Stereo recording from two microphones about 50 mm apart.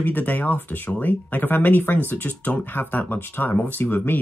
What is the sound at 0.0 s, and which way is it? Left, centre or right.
Speech, left.